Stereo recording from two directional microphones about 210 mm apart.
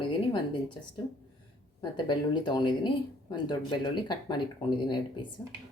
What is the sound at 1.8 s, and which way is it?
Speech, 20° left (ahead or behind).